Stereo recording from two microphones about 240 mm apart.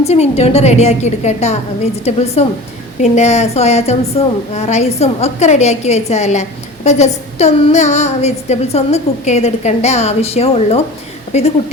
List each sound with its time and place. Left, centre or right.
0.1 s a woman's voice: left